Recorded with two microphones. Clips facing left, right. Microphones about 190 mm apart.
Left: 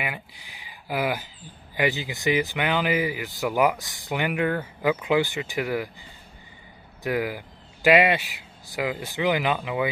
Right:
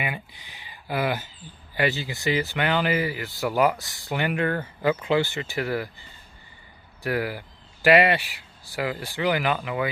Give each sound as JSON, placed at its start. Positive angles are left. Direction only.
{"t": 0.0, "sound": "speech", "side_deg": 5}